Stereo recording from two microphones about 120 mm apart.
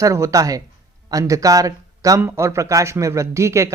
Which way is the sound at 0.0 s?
25° right (ahead or behind).